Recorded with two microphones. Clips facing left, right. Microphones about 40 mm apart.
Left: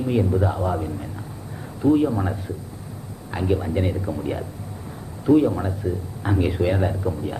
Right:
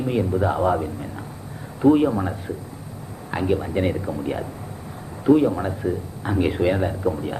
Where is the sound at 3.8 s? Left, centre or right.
Centre.